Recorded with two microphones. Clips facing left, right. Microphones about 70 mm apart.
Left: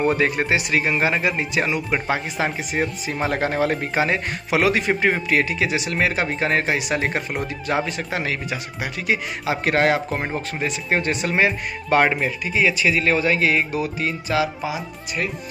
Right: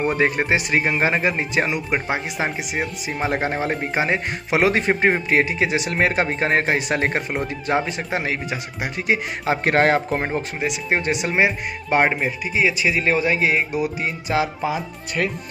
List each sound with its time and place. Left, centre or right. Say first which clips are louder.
0.2 s a man's voice: right 1 dB; right
10.6 s speech: left 1 dB; centre
14.6 s speech: right 3 dB; right